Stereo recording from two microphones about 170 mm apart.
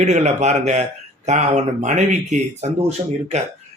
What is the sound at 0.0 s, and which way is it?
Speech, 45° right (ahead or behind).